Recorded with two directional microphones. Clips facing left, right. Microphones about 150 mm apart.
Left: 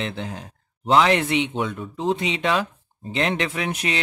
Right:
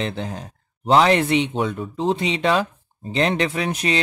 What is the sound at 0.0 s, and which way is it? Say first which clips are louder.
Speech: right 3 dB; 40° right (ahead or behind).